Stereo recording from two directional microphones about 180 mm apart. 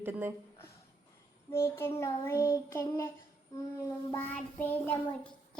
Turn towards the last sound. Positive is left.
turn(degrees=10)  # may be behind; listen again after turning